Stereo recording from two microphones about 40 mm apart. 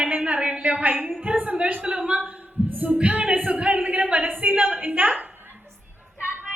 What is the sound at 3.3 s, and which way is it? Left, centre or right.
Speech, right.